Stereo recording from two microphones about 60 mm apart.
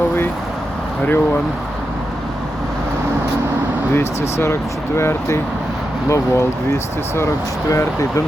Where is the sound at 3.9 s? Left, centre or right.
Left.